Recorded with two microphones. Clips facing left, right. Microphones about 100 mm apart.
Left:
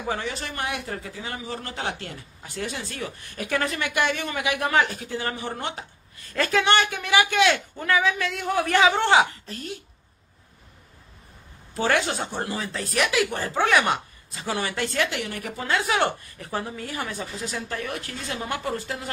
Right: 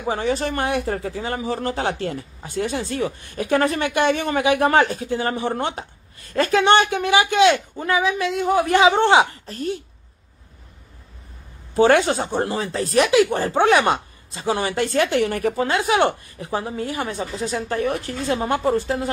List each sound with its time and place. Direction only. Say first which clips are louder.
0.2 s speech: right 9 dB; 45° right (ahead or behind)
1.6 s speech: right 8 dB; 30° right (ahead or behind)
11.7 s speech: right 8 dB; 35° right (ahead or behind)
15.7 s speech: right 2 dB; 25° right (ahead or behind)
17.2 s speech: right 7 dB; 30° right (ahead or behind)